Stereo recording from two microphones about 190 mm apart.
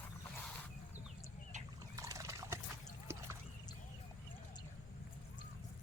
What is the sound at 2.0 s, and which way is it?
Trickle, 15° right (ahead or behind).